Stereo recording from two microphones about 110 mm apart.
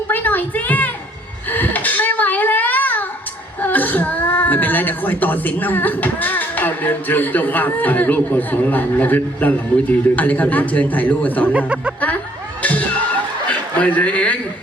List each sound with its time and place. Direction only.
0.1 s a sound: 15° left (ahead or behind)
3.6 s a man's voice: 15° left (ahead or behind)
11.5 s speech: 10° right (ahead or behind)
12.6 s chuckle: 15° left (ahead or behind)